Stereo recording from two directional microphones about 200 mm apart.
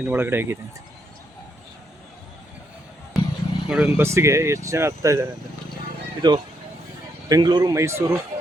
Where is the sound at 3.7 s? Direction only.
5° right (ahead or behind).